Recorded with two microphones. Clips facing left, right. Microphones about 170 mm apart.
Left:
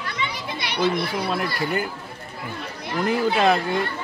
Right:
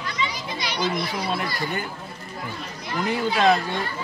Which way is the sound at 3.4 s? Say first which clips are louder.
Right 3 dB; 5° left (ahead or behind).